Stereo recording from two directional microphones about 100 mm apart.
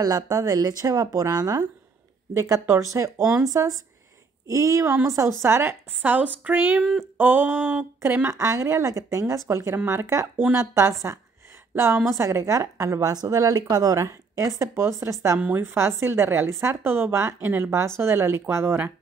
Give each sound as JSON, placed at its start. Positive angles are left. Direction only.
{"t": 0.0, "sound": "a woman's voice", "side_deg": -40}
{"t": 15.3, "sound": "a woman's voice", "side_deg": -15}